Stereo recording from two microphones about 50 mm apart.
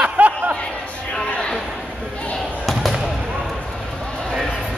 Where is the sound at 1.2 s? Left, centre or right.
Left.